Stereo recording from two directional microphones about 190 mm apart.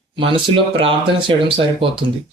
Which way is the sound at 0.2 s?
25° right (ahead or behind).